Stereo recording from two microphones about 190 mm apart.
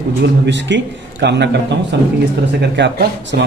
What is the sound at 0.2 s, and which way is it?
A man's voice, 65° right (ahead or behind).